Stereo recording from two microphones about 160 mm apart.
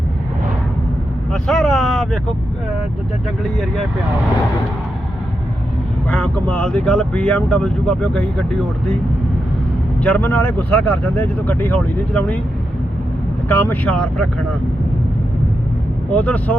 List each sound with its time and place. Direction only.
1.3 s speech: centre (ahead or behind)
6.1 s speech: 5° left (ahead or behind)
10.0 s speech: 10° left (ahead or behind)
13.5 s speech: 10° left (ahead or behind)
16.1 s speech: 10° left (ahead or behind)